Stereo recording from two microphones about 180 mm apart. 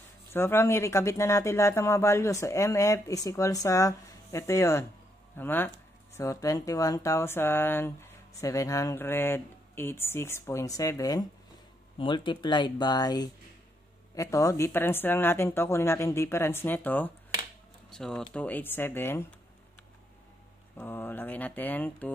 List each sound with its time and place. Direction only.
0.3 s speech: 15° left (ahead or behind)
20.7 s speech: 10° left (ahead or behind)